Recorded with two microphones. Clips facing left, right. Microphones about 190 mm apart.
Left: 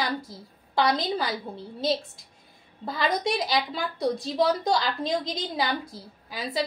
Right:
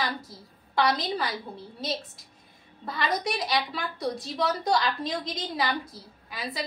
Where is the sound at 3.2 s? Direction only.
25° left (ahead or behind).